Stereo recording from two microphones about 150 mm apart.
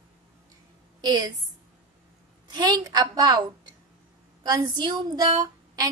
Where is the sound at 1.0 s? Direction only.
30° right (ahead or behind).